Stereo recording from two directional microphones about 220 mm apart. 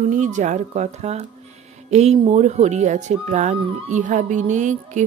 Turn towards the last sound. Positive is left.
turn(degrees=-35)  # may be behind; listen again after turning